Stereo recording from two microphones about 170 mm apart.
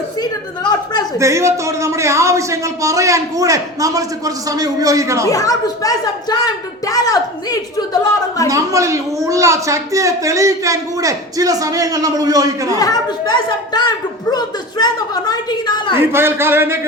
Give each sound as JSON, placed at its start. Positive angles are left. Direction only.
{"t": 0.2, "sound": "a sound", "side_deg": 25}
{"t": 1.2, "sound": "speech", "side_deg": -15}
{"t": 5.3, "sound": "a woman's voice", "side_deg": 20}
{"t": 8.4, "sound": "a woman's voice", "side_deg": -20}
{"t": 12.8, "sound": "a woman's voice", "side_deg": 25}
{"t": 16.0, "sound": "speech", "side_deg": -15}